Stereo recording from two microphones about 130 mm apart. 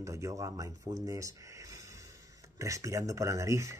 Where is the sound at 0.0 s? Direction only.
25° right (ahead or behind).